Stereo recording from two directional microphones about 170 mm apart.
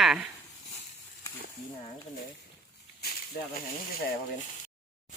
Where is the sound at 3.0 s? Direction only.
65° left (ahead or behind).